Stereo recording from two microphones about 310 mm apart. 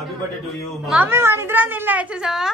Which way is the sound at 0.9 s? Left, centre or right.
Centre.